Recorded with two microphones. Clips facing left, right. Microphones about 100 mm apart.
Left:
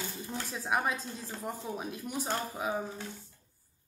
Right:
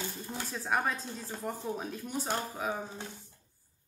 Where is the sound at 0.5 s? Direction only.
10° left (ahead or behind).